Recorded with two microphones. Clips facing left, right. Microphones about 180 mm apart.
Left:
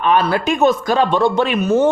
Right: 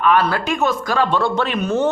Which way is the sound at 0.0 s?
20° left (ahead or behind).